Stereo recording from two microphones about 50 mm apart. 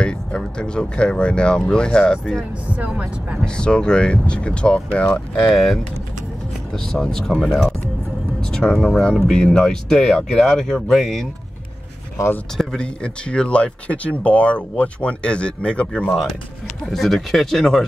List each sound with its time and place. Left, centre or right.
0.0 s speech: centre
2.9 s speech: right
3.4 s speech: centre
5.5 s speech: centre
8.4 s speech: centre
12.7 s speech: left
16.8 s speech: centre